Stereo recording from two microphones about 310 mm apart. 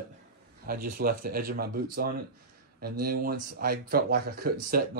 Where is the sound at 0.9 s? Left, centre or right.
Right.